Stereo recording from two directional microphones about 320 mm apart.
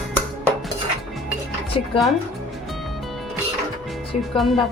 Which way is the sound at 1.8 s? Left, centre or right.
Centre.